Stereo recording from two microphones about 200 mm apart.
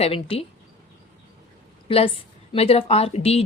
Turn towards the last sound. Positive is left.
turn(degrees=30)  # may be behind; listen again after turning